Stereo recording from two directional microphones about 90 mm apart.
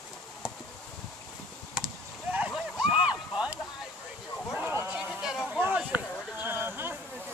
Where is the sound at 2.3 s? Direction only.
10° right (ahead or behind).